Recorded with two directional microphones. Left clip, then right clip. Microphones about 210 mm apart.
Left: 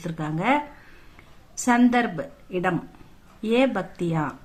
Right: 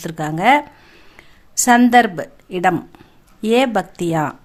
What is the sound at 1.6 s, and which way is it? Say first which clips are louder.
A woman's voice: right 9 dB; 50° right (ahead or behind).